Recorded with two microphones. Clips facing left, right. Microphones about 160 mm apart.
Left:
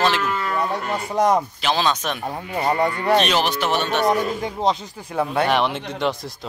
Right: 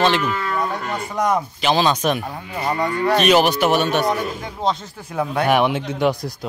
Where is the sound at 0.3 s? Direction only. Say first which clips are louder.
Even; centre (ahead or behind).